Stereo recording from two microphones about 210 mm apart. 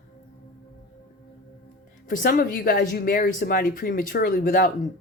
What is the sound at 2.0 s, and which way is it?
Speech, 40° left (ahead or behind).